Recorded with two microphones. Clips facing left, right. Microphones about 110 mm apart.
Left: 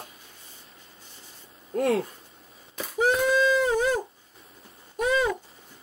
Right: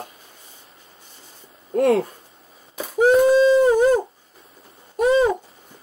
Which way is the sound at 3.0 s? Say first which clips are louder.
Right 8 dB; 35° right (ahead or behind).